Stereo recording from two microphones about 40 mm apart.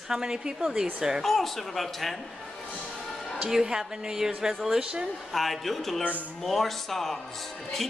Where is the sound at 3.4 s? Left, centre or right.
Centre.